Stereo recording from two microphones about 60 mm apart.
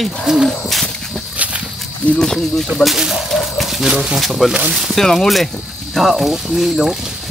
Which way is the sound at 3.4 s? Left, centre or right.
Centre.